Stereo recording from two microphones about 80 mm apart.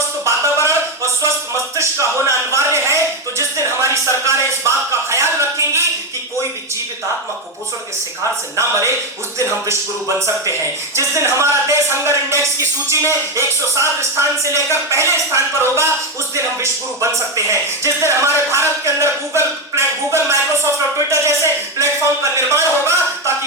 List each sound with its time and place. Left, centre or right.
0.6 s a sound: right
10.2 s a man's voice: right
17.0 s a man's voice: right